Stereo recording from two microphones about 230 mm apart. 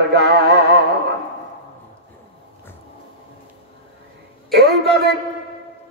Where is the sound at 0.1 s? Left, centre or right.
Right.